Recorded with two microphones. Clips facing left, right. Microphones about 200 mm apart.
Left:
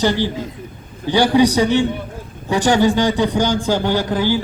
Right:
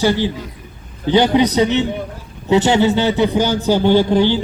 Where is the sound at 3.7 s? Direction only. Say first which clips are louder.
Right 5 dB; 20° right (ahead or behind).